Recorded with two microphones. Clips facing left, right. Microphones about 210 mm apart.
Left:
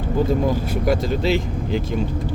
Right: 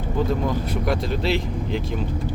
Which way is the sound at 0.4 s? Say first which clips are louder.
Left 3 dB; 5° left (ahead or behind).